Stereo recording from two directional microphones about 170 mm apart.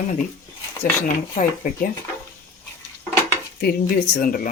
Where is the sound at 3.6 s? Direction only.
60° left (ahead or behind).